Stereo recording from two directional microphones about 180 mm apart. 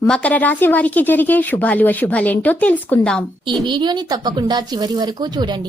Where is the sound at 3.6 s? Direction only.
25° right (ahead or behind).